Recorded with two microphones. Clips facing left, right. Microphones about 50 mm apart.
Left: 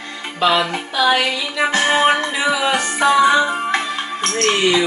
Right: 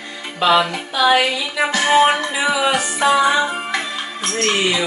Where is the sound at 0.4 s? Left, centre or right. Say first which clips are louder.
Right 1 dB; centre.